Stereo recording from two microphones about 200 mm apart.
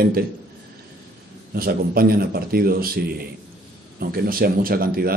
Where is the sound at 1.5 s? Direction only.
50° right (ahead or behind).